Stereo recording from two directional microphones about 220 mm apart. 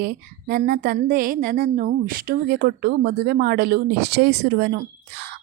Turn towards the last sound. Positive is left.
turn(degrees=-50)  # may be behind; listen again after turning